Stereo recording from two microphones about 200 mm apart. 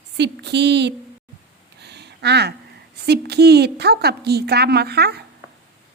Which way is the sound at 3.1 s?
55° right (ahead or behind).